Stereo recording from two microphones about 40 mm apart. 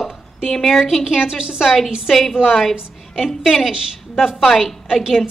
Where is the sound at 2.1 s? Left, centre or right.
Centre.